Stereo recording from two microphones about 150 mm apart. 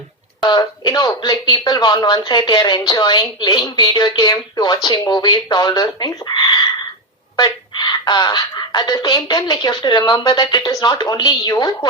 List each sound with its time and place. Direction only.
0.4 s speech: 30° left (ahead or behind)